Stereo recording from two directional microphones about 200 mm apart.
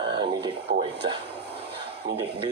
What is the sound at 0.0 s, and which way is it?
Speech, 25° right (ahead or behind).